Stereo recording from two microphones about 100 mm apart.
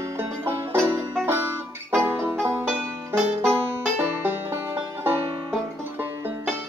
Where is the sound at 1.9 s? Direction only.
25° right (ahead or behind).